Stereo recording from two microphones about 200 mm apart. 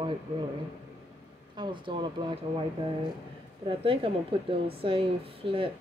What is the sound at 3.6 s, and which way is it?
Speech, 25° right (ahead or behind).